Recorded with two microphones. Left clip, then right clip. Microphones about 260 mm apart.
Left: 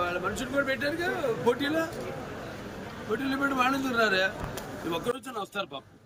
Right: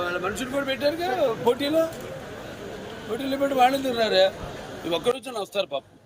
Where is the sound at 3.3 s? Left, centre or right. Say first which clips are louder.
Right 7 dB; centre.